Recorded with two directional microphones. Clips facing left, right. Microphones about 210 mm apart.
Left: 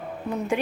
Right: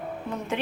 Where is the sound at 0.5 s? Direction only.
10° left (ahead or behind).